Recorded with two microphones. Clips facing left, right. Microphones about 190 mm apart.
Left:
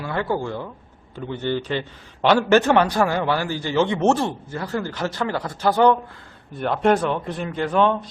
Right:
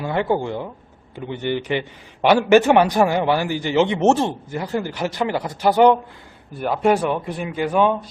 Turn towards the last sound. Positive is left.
turn(degrees=-10)  # may be behind; listen again after turning